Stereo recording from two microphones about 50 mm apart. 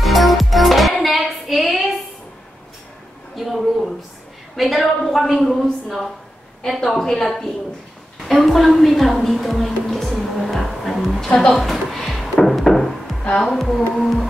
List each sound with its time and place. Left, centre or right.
0.0 s music: centre
3.3 s a sound: centre
4.6 s a woman's voice: centre
11.5 s music: centre
13.5 s a woman's voice: centre